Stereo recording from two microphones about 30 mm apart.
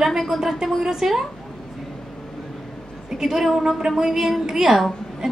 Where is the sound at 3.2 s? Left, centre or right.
Centre.